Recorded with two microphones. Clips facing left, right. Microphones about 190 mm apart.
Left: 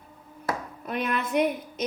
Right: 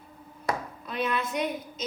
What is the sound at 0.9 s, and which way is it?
Speech, 55° left (ahead or behind).